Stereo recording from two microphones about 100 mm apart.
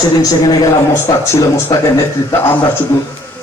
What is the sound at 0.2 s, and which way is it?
Speech, 40° left (ahead or behind).